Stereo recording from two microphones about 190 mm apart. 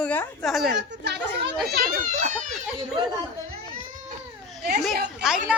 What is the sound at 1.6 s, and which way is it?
Speech, 45° right (ahead or behind).